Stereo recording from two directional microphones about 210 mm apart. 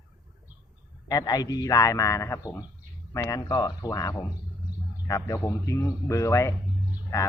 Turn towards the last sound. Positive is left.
turn(degrees=15)  # may be behind; listen again after turning